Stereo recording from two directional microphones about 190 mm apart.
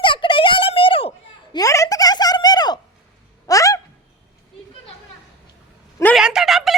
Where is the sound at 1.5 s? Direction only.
15° left (ahead or behind).